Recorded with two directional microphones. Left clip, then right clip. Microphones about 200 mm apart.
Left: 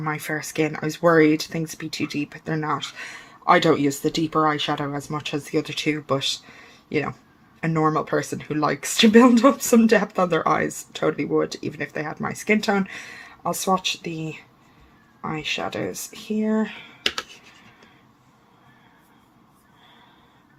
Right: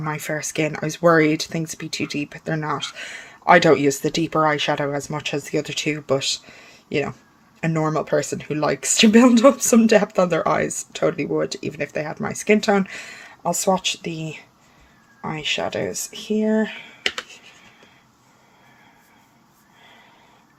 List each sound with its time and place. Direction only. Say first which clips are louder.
0.0 s speech: right 1 dB; 40° right (ahead or behind)
6.5 s a sound: right 1 dB; 45° right (ahead or behind)
7.8 s speech: even; 40° right (ahead or behind)